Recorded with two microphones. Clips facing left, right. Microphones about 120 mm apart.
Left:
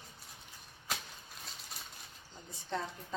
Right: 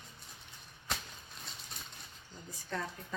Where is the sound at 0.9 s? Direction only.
Centre (ahead or behind).